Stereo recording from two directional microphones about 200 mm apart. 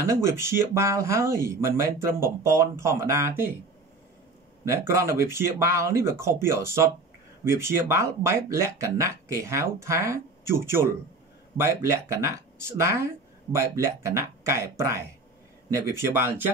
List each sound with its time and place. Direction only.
0.0 s speech: 15° right (ahead or behind)
4.6 s speech: 15° right (ahead or behind)